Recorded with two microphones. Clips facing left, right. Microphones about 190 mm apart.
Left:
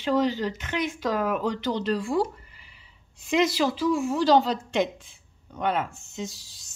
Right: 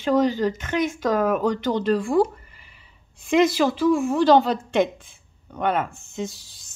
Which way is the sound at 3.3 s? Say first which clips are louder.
Right 4 dB; 50° right (ahead or behind).